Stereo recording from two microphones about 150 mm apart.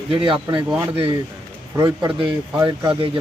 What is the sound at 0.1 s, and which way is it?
Speech, 35° right (ahead or behind).